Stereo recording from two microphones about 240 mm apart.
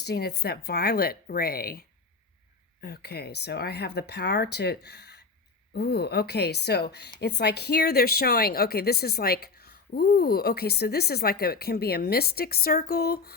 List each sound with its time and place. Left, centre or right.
0.0 s speech: left
2.8 s speech: left